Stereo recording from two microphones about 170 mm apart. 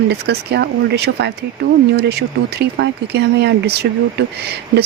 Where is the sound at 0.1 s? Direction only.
75° right (ahead or behind).